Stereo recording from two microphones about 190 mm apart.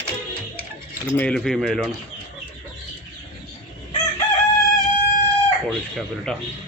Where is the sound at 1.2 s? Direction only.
5° left (ahead or behind).